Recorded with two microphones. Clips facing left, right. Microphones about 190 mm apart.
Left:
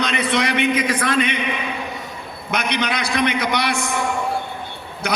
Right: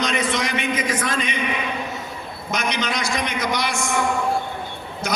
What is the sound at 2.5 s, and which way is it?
A man's voice, 60° left (ahead or behind).